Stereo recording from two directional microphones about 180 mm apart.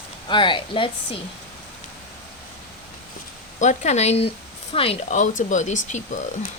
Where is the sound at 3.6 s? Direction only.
40° left (ahead or behind).